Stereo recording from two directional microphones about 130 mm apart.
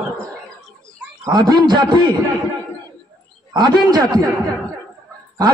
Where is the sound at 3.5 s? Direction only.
30° right (ahead or behind).